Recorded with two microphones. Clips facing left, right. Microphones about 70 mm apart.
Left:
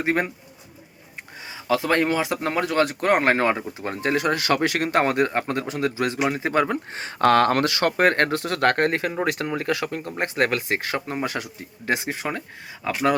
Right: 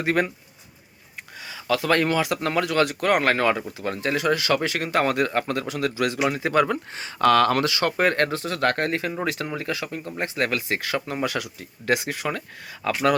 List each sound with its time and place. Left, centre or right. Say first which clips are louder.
0.0 s speech: even; left
1.6 s speech: even; left
5.0 s speech: left 1 dB; left
6.9 s speech: left 1 dB; left; by 13.1 s centre